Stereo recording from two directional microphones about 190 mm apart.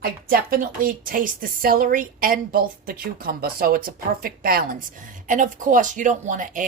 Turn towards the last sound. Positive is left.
turn(degrees=-45)  # may be behind; listen again after turning